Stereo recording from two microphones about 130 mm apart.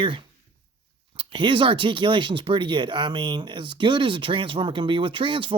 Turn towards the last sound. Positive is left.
turn(degrees=-40)  # may be behind; listen again after turning